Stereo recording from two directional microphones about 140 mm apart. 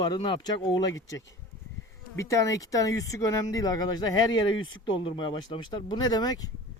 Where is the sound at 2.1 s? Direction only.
20° left (ahead or behind).